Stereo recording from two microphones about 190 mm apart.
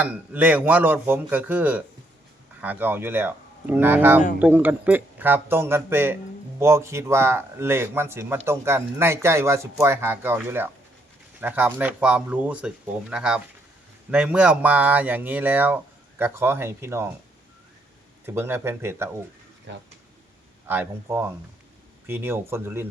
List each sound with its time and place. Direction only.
0.0 s speech: 10° right (ahead or behind)
18.3 s speech: 10° right (ahead or behind)
19.7 s speech: 70° right (ahead or behind)
20.7 s speech: 10° right (ahead or behind)